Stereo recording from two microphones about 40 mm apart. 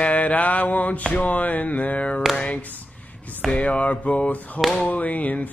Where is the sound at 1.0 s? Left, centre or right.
Left.